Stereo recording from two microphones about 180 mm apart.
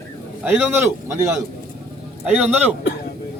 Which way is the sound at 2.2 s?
5° right (ahead or behind).